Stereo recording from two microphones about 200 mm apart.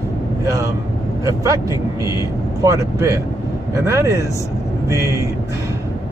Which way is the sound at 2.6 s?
15° right (ahead or behind).